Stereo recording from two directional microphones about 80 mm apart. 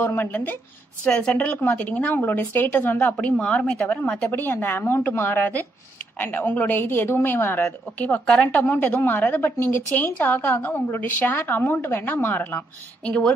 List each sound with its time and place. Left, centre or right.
0.0 s a woman's voice: left
1.0 s a woman's voice: centre